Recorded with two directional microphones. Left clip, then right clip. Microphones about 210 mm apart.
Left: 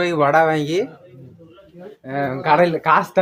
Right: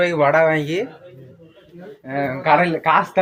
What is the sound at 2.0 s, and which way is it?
Speech, 15° left (ahead or behind).